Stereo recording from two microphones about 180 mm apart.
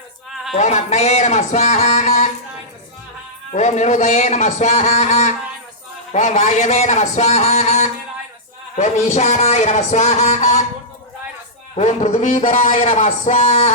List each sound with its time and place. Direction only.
0.5 s a man's voice: 40° left (ahead or behind)
3.5 s a man's voice: 40° left (ahead or behind)
11.8 s a man's voice: 40° left (ahead or behind)